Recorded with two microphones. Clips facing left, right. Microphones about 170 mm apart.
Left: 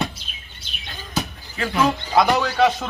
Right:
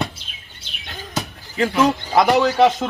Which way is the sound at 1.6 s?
20° right (ahead or behind).